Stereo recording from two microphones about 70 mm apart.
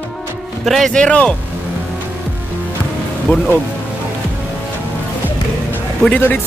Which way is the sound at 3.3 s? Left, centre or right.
Left.